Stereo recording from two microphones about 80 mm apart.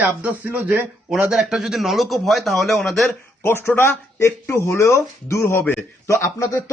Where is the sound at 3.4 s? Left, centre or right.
Left.